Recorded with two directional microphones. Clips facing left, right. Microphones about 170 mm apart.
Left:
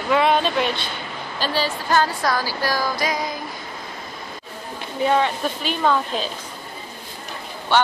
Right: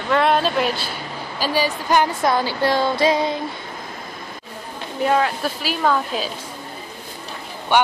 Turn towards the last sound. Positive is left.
turn(degrees=-15)  # may be behind; listen again after turning